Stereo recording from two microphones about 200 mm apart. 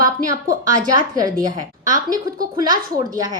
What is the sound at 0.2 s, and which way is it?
Speech, 40° right (ahead or behind).